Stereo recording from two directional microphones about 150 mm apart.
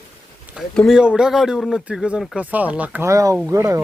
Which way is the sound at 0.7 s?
Centre (ahead or behind).